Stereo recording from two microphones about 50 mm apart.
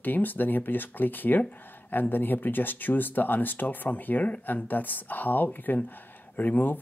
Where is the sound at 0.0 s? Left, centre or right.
Left.